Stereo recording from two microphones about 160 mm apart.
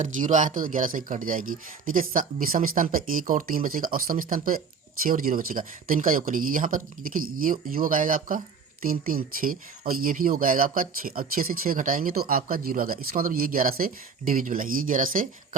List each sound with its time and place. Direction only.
0.0 s speech: 50° right (ahead or behind)